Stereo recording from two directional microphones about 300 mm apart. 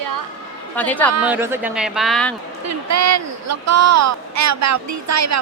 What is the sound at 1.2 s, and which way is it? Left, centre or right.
Speech, centre.